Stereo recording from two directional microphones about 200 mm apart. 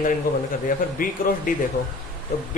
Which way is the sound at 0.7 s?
45° left (ahead or behind).